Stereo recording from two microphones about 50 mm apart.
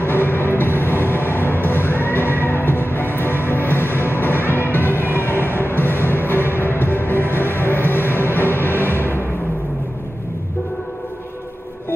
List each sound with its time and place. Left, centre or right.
0.0 s music: left